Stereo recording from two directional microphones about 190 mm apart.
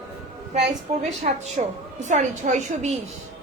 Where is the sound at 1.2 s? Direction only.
40° right (ahead or behind).